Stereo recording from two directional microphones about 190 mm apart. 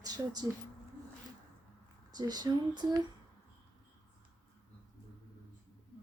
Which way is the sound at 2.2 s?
20° right (ahead or behind).